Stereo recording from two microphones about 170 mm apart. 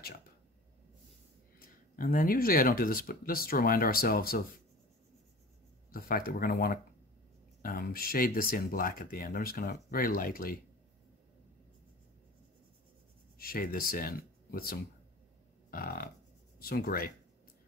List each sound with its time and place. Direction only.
1.6 s speech: 60° left (ahead or behind)
5.9 s speech: 60° left (ahead or behind)
13.4 s speech: 60° left (ahead or behind)